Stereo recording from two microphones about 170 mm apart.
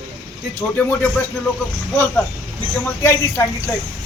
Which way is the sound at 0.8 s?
5° left (ahead or behind).